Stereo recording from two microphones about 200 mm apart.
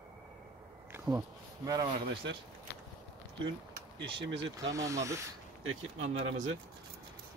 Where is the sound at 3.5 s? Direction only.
65° right (ahead or behind).